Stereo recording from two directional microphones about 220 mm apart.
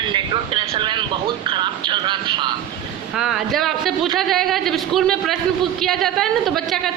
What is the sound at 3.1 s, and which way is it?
A man's voice, centre (ahead or behind).